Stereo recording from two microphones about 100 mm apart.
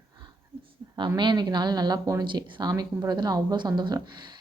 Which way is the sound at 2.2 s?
50° right (ahead or behind).